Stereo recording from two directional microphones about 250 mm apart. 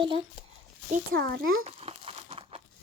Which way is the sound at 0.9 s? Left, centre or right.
Right.